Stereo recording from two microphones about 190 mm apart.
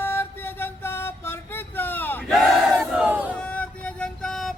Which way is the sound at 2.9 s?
5° right (ahead or behind).